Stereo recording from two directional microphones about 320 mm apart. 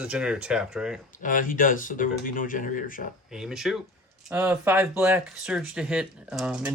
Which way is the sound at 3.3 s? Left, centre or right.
Centre.